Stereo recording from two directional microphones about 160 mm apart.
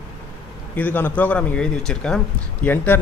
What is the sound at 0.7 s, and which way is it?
Speech, 10° left (ahead or behind).